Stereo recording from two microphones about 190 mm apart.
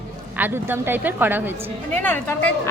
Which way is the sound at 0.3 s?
10° right (ahead or behind).